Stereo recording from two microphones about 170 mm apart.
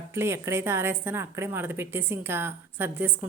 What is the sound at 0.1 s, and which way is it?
A woman's voice, 15° right (ahead or behind).